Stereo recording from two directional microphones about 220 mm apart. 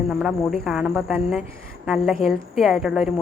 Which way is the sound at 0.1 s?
5° right (ahead or behind).